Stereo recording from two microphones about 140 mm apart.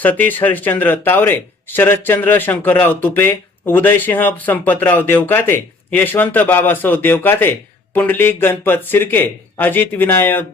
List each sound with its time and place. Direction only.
0.0 s speech: 10° left (ahead or behind)